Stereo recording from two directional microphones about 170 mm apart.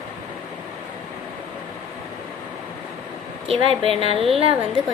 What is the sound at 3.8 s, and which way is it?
Speech, 35° right (ahead or behind).